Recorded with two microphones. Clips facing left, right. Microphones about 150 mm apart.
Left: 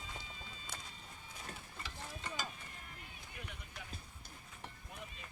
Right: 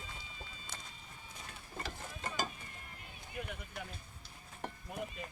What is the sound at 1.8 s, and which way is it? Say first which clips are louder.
Mechanisms: right 6 dB; 45° right (ahead or behind).